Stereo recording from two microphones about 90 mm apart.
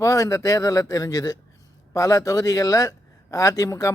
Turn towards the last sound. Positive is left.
turn(degrees=35)  # may be behind; listen again after turning